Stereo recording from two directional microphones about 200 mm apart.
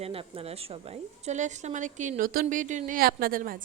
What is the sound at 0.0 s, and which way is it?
A woman's voice, 30° right (ahead or behind).